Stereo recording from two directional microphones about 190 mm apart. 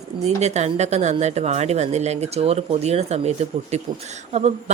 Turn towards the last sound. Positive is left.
turn(degrees=-35)  # may be behind; listen again after turning